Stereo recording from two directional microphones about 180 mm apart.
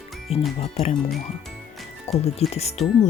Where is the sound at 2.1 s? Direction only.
35° left (ahead or behind).